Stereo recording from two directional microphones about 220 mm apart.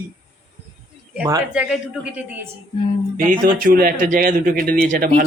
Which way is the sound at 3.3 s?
40° right (ahead or behind).